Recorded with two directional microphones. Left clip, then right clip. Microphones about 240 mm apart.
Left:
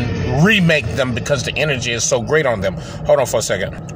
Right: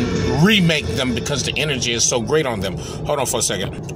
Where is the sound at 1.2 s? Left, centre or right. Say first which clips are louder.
Left 3 dB; left.